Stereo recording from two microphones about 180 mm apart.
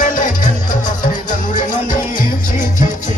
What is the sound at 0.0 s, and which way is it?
Music, 45° left (ahead or behind).